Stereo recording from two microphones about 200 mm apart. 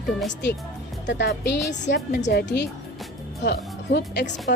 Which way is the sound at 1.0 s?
55° left (ahead or behind).